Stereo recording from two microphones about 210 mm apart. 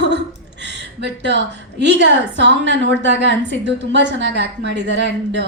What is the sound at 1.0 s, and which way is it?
Speech, 55° right (ahead or behind).